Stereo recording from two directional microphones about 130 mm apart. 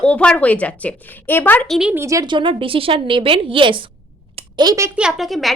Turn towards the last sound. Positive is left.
turn(degrees=0)  # may be behind; listen again after turning